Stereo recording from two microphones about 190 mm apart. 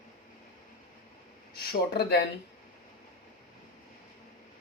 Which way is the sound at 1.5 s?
60° left (ahead or behind).